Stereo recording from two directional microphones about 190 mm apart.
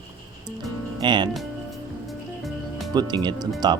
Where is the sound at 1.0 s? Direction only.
25° right (ahead or behind).